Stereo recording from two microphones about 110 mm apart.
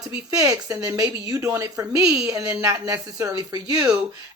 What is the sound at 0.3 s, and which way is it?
A woman's voice, 30° right (ahead or behind).